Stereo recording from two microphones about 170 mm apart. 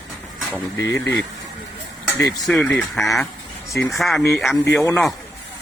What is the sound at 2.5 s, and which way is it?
Speech, 5° left (ahead or behind).